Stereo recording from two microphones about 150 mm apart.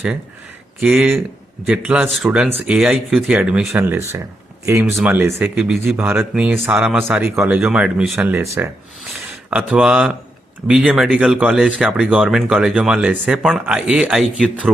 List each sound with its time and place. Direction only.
0.8 s speech: 5° right (ahead or behind)
9.5 s speech: 5° right (ahead or behind)